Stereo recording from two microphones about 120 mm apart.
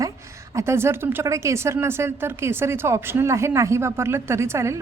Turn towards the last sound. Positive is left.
turn(degrees=-25)  # may be behind; listen again after turning